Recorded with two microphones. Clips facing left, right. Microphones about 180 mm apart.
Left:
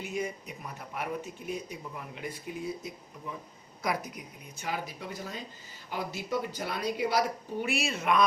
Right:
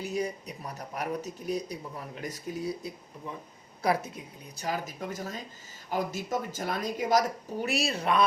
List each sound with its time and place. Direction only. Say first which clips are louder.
0.0 s a woman's voice: right 3 dB; 35° right (ahead or behind)